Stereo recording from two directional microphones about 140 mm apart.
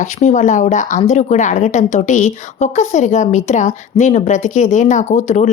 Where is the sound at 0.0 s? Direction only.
60° left (ahead or behind).